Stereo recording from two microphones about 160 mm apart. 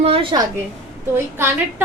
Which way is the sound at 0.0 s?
35° right (ahead or behind).